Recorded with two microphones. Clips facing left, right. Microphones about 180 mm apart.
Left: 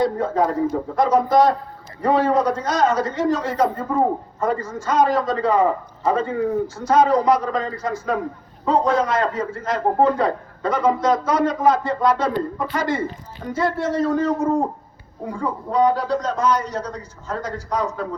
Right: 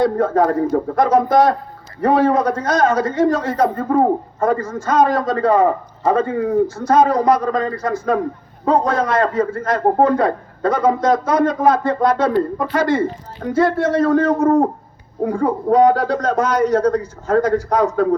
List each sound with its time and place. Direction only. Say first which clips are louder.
0.2 s a man's voice: right 4 dB; 50° right (ahead or behind)